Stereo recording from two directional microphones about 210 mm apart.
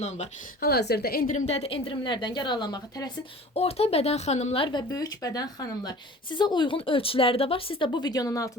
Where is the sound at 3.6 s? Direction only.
30° left (ahead or behind).